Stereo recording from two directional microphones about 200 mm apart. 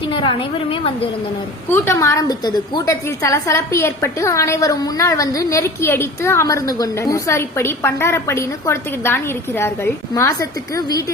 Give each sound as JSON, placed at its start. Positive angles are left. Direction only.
{"t": 0.1, "sound": "a woman's voice", "side_deg": 25}
{"t": 1.7, "sound": "a woman's voice", "side_deg": 15}